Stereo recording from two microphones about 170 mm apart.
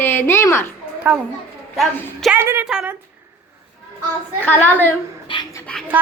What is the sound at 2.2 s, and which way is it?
Speech, 10° right (ahead or behind).